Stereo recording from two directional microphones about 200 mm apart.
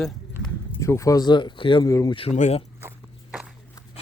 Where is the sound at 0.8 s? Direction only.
15° left (ahead or behind); by 2.6 s 35° left (ahead or behind).